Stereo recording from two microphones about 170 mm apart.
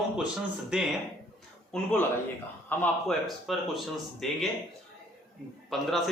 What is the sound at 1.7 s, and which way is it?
A man's voice, 5° left (ahead or behind).